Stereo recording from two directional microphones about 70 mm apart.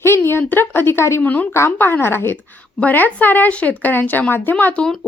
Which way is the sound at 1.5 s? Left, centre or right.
Left.